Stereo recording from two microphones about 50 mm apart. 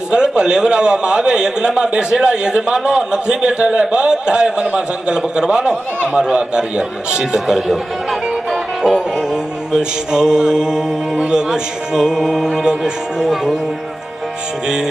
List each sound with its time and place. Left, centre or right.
0.1 s a man's voice: centre